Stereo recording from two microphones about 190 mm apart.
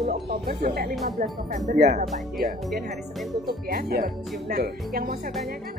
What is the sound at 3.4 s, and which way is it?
Speech, 50° right (ahead or behind).